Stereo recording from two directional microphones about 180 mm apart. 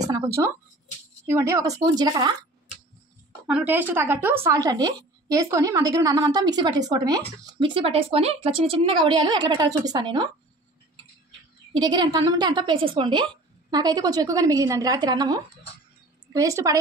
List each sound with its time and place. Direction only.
0.0 s speech: 20° right (ahead or behind)
3.4 s speech: 10° right (ahead or behind); by 10.3 s 25° right (ahead or behind)
11.7 s speech: 25° right (ahead or behind)